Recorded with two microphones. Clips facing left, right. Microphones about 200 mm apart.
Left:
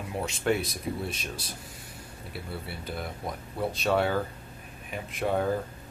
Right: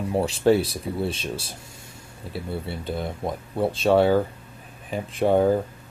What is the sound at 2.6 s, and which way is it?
Speech, 25° right (ahead or behind).